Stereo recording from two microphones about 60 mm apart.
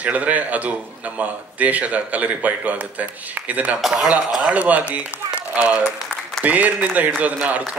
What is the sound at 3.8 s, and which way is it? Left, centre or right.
Speech, centre.